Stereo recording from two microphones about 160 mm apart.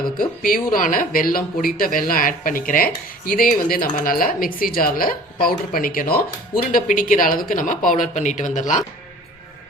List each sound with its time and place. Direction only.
0.2 s speech: 60° left (ahead or behind)